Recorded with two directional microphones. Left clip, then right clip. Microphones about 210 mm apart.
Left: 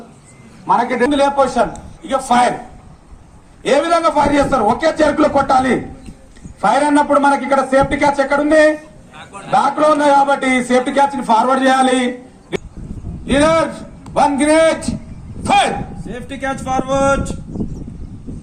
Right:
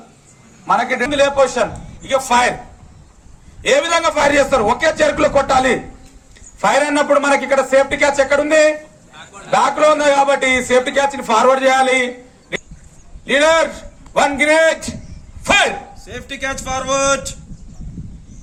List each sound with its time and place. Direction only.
0.7 s a man's voice: 20° right (ahead or behind)
3.6 s a man's voice: 20° right (ahead or behind)
16.0 s speech: 10° left (ahead or behind)